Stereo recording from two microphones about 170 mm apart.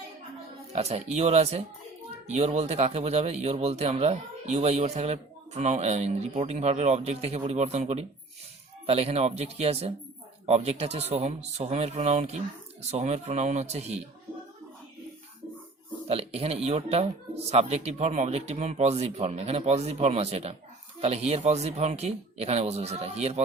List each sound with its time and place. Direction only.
0.7 s speech: 40° right (ahead or behind)
16.0 s speech: 35° right (ahead or behind)